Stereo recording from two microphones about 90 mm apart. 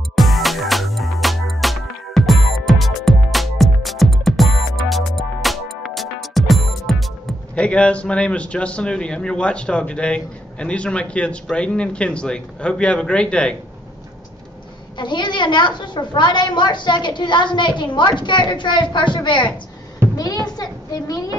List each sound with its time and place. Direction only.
0.1 s music: centre (ahead or behind)
7.5 s a man's voice: 15° left (ahead or behind)
15.0 s a woman's voice: 60° left (ahead or behind)
20.4 s a woman's voice: 50° left (ahead or behind)